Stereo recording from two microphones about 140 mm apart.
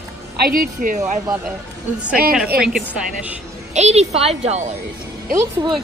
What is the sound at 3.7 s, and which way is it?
A woman's voice, 50° right (ahead or behind).